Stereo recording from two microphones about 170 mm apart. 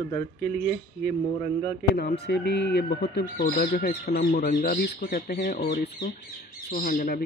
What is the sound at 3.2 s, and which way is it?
Speech, 60° left (ahead or behind).